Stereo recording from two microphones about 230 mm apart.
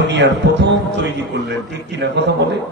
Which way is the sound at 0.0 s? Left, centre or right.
Right.